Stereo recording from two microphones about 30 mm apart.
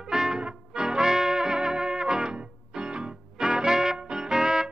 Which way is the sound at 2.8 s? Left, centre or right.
Right.